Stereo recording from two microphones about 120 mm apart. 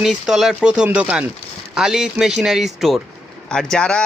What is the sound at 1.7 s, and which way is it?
A man's voice, 5° right (ahead or behind).